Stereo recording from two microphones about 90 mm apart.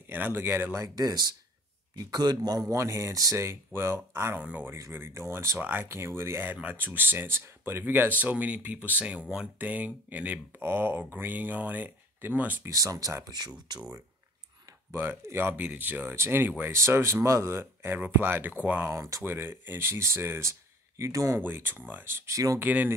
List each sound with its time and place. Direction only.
0.0 s speech: 25° right (ahead or behind)
0.9 s a man's voice: 45° right (ahead or behind)
2.7 s speech: 35° right (ahead or behind)
4.4 s speech: 15° right (ahead or behind)
4.9 s speech: 30° right (ahead or behind)
12.6 s speech: 40° right (ahead or behind)
14.9 s speech: 30° right (ahead or behind)
21.4 s speech: 20° right (ahead or behind)
22.6 s speech: 20° right (ahead or behind)